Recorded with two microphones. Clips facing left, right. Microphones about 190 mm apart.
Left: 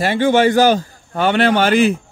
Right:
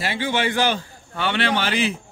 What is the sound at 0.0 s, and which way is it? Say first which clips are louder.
A man's voice: left 10 dB; 50° left (ahead or behind).